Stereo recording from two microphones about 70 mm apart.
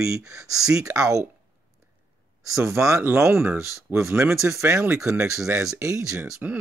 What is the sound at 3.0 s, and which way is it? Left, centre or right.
Speech, right.